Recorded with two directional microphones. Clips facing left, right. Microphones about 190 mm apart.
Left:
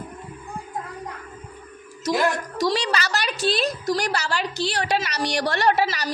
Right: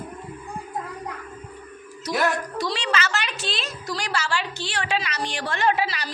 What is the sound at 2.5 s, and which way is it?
A woman's voice, 40° left (ahead or behind).